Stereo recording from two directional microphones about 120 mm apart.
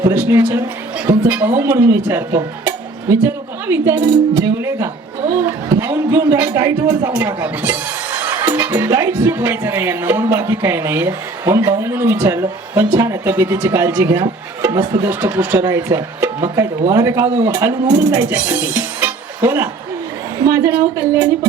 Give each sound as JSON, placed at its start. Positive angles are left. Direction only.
{"t": 0.1, "sound": "speech", "side_deg": -20}
{"t": 14.7, "sound": "speech", "side_deg": -35}
{"t": 15.0, "sound": "speech", "side_deg": -20}
{"t": 15.6, "sound": "speech", "side_deg": -30}
{"t": 20.7, "sound": "speech", "side_deg": -15}